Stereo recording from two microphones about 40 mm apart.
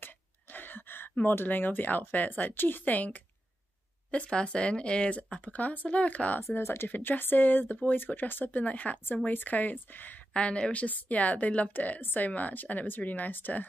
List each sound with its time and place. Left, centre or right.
0.0 s a sound: left
1.2 s speech: left
2.8 s speech: left
4.1 s speech: left
6.5 s speech: left
6.9 s speech: left
8.6 s speech: left
10.3 s speech: left